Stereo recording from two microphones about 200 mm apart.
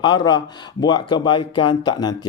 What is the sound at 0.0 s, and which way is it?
Speech, 20° left (ahead or behind).